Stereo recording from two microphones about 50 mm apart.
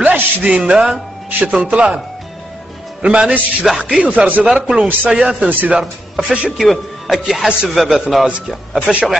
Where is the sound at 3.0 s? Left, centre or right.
Right.